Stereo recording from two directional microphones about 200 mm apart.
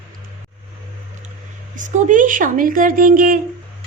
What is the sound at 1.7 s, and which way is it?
A woman's voice, 40° right (ahead or behind).